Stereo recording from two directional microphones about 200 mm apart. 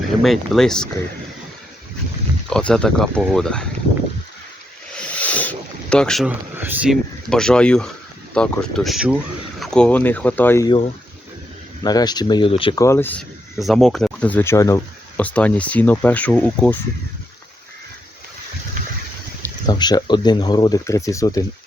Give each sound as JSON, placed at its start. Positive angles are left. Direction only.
{"t": 0.2, "sound": "speech", "side_deg": 0}
{"t": 2.5, "sound": "speech", "side_deg": 5}
{"t": 4.9, "sound": "rub", "side_deg": 5}
{"t": 6.6, "sound": "speech", "side_deg": -5}
{"t": 11.8, "sound": "speech", "side_deg": 20}
{"t": 12.8, "sound": "speech", "side_deg": 10}
{"t": 19.4, "sound": "speech", "side_deg": 20}